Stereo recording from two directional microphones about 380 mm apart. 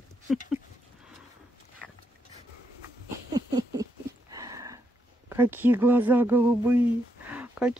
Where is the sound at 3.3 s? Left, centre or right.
Centre.